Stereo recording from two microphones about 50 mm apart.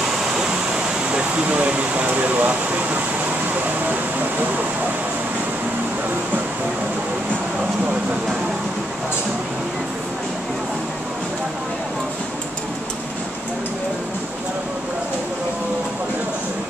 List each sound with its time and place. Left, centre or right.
1.5 s speech: right